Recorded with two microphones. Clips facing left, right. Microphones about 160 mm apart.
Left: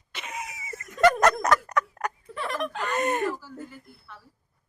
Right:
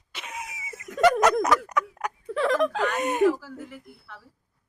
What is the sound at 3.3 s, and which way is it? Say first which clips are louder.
Speech: right 6 dB; 75° right (ahead or behind).